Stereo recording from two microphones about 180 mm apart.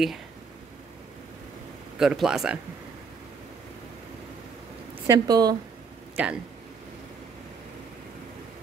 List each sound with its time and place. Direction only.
2.0 s speech: 5° right (ahead or behind)
5.0 s a woman's voice: 20° right (ahead or behind)
6.1 s speech: 5° right (ahead or behind)